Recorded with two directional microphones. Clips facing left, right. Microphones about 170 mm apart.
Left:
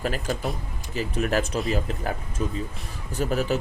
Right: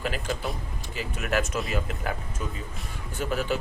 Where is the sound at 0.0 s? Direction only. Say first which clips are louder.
Left 3 dB; 40° left (ahead or behind).